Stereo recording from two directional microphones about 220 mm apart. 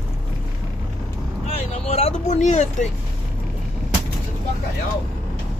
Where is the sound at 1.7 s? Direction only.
30° left (ahead or behind).